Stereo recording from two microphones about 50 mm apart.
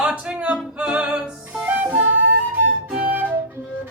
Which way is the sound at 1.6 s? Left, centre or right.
Right.